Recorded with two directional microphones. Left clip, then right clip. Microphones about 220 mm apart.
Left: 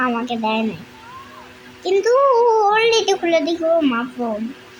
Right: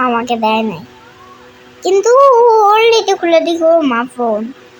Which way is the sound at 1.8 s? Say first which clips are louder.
Right 7 dB; 10° right (ahead or behind).